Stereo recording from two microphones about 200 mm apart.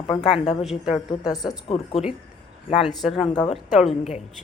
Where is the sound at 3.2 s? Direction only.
20° left (ahead or behind).